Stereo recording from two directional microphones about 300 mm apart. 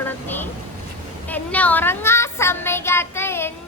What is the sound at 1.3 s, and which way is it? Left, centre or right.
Child singing, centre.